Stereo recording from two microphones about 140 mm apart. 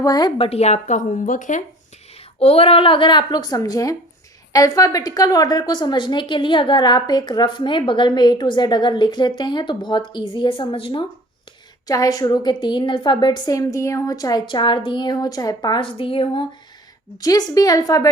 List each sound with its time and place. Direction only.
0.0 s speech: 30° left (ahead or behind); by 1.6 s 65° left (ahead or behind)
2.1 s a woman's voice: 45° left (ahead or behind)
11.9 s a woman's voice: 25° left (ahead or behind)
17.2 s a woman's voice: 25° left (ahead or behind)